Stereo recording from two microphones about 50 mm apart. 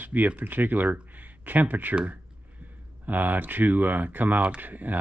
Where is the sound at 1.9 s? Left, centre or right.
Right.